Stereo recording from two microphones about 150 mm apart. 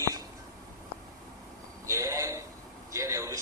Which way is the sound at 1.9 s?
20° right (ahead or behind).